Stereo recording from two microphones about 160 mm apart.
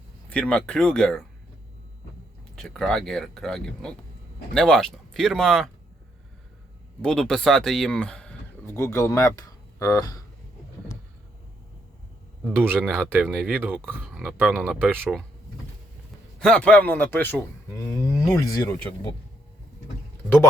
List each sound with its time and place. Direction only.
0.3 s speech: 5° left (ahead or behind)
2.6 s speech: centre (ahead or behind)
7.0 s speech: 5° left (ahead or behind); by 10.2 s 20° left (ahead or behind)
12.5 s speech: 15° right (ahead or behind)
13.2 s speech: centre (ahead or behind)
13.5 s speech: 10° right (ahead or behind)
16.4 s a man's voice: 5° left (ahead or behind)